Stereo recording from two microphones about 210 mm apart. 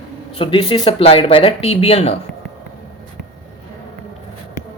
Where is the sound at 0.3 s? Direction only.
25° left (ahead or behind).